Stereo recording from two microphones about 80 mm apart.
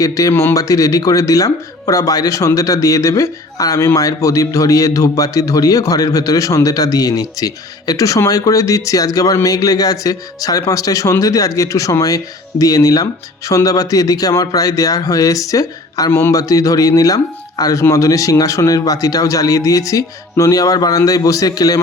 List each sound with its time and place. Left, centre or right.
0.0 s speech: left